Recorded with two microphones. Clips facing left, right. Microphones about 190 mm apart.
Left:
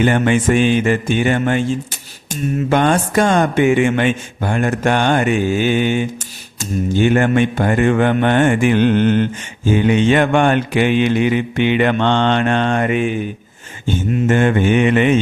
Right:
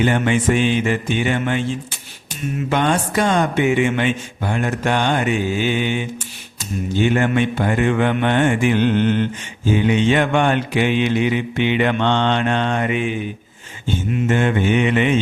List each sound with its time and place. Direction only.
0.0 s music: 50° left (ahead or behind)